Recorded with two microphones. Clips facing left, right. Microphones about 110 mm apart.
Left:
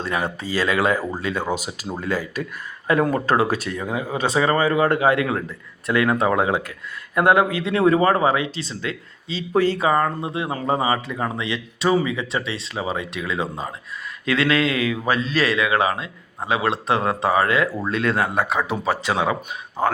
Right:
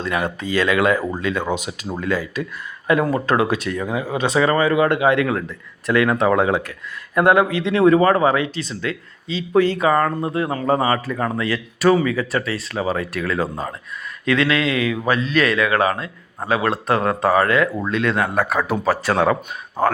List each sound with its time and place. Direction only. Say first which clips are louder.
0.0 s a man's voice: right 2 dB; 35° left (ahead or behind); by 13.4 s 20° left (ahead or behind)
14.3 s a man's voice: right 1 dB; 35° left (ahead or behind)
17.8 s a man's voice: right 1 dB; 40° left (ahead or behind)